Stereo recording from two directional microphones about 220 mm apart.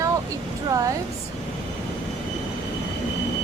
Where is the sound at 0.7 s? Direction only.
15° right (ahead or behind).